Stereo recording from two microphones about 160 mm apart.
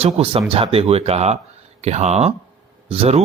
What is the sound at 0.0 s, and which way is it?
Speech, 35° right (ahead or behind).